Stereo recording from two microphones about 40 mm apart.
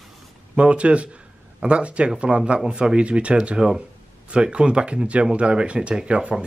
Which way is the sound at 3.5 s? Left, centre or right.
Centre.